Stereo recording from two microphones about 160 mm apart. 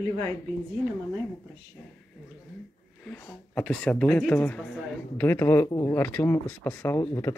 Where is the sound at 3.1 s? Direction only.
10° left (ahead or behind).